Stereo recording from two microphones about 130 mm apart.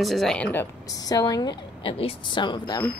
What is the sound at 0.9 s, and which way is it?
A woman's voice, 30° left (ahead or behind).